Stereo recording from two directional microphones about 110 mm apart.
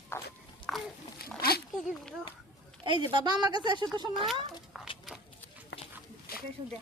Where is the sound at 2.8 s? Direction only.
50° right (ahead or behind).